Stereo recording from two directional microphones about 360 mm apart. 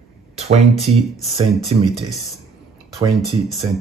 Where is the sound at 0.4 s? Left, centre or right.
Centre.